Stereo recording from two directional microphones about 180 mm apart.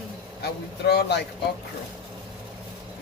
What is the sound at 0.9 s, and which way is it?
Speech, 70° left (ahead or behind).